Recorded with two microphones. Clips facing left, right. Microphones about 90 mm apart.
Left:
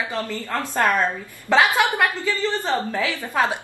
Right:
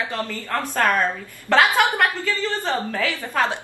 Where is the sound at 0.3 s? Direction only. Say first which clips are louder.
Even; 20° left (ahead or behind).